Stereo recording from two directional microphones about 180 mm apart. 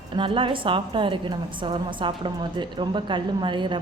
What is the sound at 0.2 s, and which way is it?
A woman's voice, 30° right (ahead or behind).